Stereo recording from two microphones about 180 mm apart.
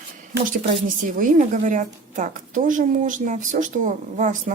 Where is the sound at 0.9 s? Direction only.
45° right (ahead or behind).